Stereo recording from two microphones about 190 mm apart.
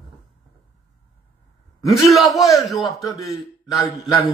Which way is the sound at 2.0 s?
Centre (ahead or behind).